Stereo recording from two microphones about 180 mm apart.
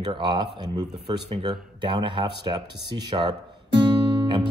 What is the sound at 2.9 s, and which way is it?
Guitar, 25° right (ahead or behind).